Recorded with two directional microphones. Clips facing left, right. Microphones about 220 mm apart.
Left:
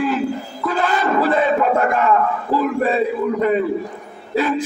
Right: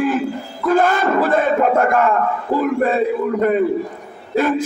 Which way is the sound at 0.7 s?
50° right (ahead or behind).